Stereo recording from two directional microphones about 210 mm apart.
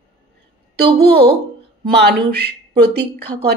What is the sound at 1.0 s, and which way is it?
Speech, 50° right (ahead or behind).